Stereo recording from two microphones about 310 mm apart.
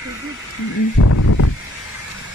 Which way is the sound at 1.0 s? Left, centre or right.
Left.